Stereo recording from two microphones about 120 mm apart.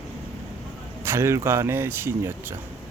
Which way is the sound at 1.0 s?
20° right (ahead or behind).